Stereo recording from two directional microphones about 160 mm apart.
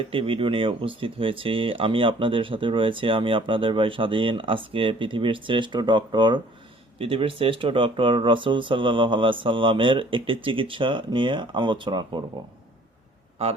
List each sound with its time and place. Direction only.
0.1 s speech: 35° right (ahead or behind)